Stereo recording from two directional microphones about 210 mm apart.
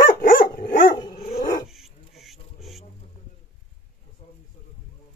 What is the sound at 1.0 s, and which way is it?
Dog, 20° left (ahead or behind).